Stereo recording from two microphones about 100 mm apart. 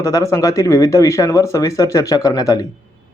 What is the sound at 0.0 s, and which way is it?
Speech, 30° left (ahead or behind).